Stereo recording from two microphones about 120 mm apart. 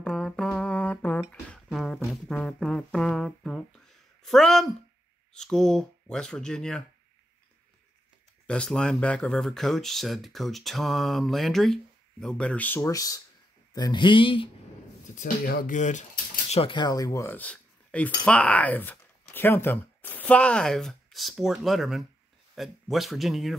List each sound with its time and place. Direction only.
0.0 s music: 5° left (ahead or behind)
1.5 s a sound: centre (ahead or behind)
8.5 s speech: 5° left (ahead or behind)
12.9 s speech: 30° left (ahead or behind); by 14.5 s 45° left (ahead or behind)
15.7 s a sound: 90° left
16.5 s speech: 45° left (ahead or behind); by 17.4 s 25° left (ahead or behind)
17.4 s speech: 10° left (ahead or behind)